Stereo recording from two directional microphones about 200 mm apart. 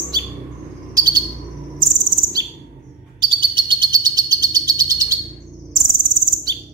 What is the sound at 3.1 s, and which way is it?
Bird, 25° right (ahead or behind).